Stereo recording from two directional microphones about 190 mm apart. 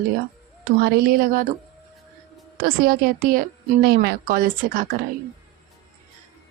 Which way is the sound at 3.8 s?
60° right (ahead or behind).